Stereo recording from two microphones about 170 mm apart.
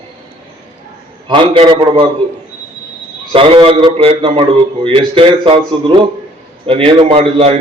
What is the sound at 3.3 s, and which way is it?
Speech, 35° right (ahead or behind).